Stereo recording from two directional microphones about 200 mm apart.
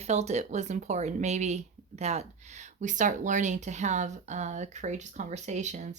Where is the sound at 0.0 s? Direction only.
35° right (ahead or behind).